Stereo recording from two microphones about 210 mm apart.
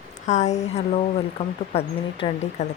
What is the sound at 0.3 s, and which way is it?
Speech, 35° left (ahead or behind).